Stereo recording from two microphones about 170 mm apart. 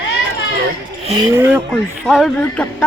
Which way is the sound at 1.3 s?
15° right (ahead or behind).